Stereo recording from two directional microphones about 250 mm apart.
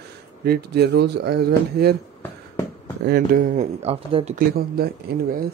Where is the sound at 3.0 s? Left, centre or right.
Right.